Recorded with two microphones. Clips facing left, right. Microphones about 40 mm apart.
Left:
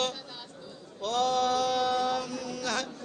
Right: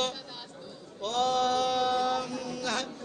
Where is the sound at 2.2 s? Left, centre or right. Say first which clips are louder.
Even; right.